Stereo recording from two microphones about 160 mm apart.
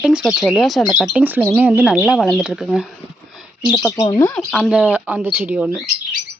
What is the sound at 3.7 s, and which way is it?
Speech, centre (ahead or behind).